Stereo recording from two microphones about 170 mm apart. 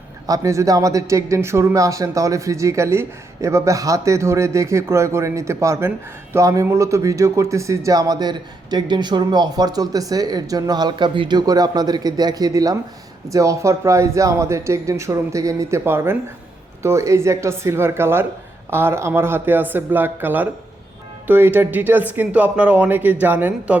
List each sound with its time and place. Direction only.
0.3 s speech: 20° right (ahead or behind)